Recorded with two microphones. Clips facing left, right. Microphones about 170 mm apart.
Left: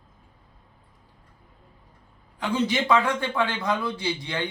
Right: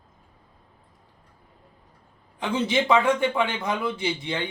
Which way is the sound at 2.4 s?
20° right (ahead or behind).